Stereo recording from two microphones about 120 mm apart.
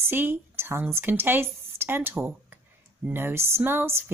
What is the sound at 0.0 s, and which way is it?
Speech, 20° right (ahead or behind).